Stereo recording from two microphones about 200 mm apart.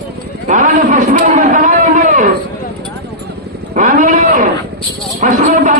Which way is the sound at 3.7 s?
40° right (ahead or behind).